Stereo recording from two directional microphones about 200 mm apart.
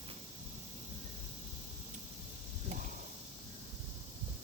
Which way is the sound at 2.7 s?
35° right (ahead or behind).